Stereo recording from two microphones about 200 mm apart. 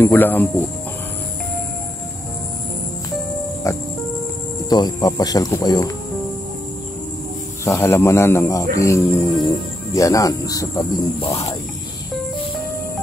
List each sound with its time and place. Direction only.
0.0 s speech: 10° left (ahead or behind)
3.6 s speech: 15° left (ahead or behind)
7.6 s speech: 15° left (ahead or behind)
11.1 s speech: 30° left (ahead or behind)